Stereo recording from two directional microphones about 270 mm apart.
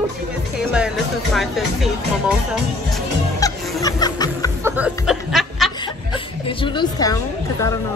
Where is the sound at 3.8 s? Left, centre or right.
Centre.